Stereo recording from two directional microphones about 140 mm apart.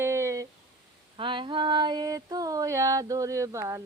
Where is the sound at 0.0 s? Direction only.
20° right (ahead or behind).